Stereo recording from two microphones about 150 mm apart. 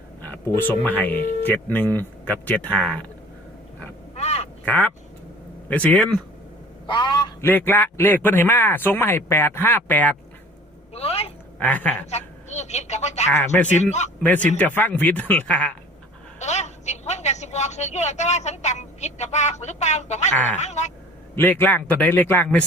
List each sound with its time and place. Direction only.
0.2 s speech: 15° left (ahead or behind)
4.1 s quack: 45° left (ahead or behind)
4.6 s speech: 10° left (ahead or behind)
6.8 s a man's voice: 30° left (ahead or behind)
7.4 s speech: 15° left (ahead or behind)
10.9 s a sound: 40° left (ahead or behind)
11.6 s speech: 10° left (ahead or behind)
12.1 s a woman's voice: 50° left (ahead or behind)
13.5 s speech: 10° left (ahead or behind)
16.4 s a woman's voice: 50° left (ahead or behind)
20.6 s a sound: 50° left (ahead or behind)
21.3 s speech: 10° left (ahead or behind)